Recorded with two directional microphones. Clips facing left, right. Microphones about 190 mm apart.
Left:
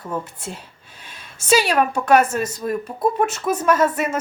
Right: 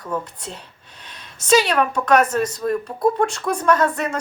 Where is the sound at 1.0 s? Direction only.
5° left (ahead or behind).